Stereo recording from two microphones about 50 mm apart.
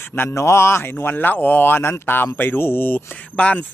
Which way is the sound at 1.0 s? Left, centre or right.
Left.